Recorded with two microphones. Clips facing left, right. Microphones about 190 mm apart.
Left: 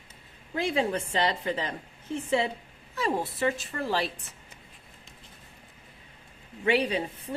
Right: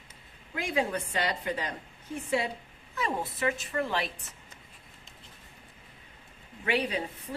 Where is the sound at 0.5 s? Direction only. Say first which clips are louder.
Left 3 dB; 25° left (ahead or behind).